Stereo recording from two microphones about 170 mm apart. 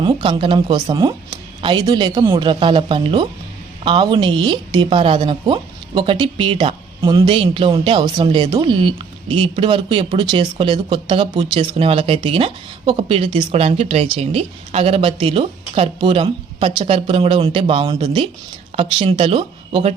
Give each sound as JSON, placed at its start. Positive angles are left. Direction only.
{"t": 0.0, "sound": "speech", "side_deg": -30}